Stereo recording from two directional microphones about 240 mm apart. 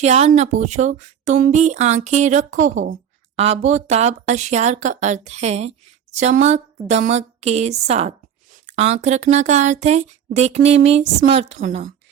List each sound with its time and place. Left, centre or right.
0.0 s speech: right